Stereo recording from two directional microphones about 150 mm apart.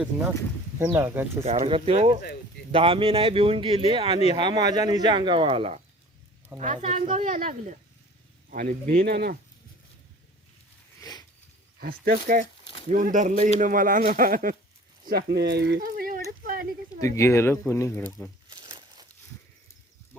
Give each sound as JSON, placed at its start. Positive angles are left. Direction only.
{"t": 0.0, "sound": "speech", "side_deg": -5}
{"t": 1.5, "sound": "speech", "side_deg": -45}
{"t": 6.6, "sound": "speech", "side_deg": -50}
{"t": 11.0, "sound": "a sound", "side_deg": 25}
{"t": 11.8, "sound": "speech", "side_deg": -80}
{"t": 14.1, "sound": "speech", "side_deg": -70}
{"t": 15.0, "sound": "speech", "side_deg": -90}
{"t": 15.5, "sound": "a sound", "side_deg": -80}
{"t": 17.2, "sound": "speech", "side_deg": 20}
{"t": 18.4, "sound": "a sound", "side_deg": -30}